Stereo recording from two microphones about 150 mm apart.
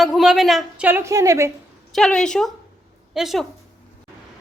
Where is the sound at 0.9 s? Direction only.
15° right (ahead or behind).